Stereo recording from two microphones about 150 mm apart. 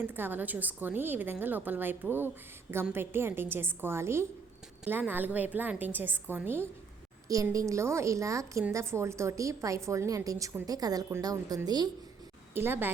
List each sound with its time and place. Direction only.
0.0 s a woman's voice: 15° right (ahead or behind)
12.5 s a woman's voice: 15° right (ahead or behind)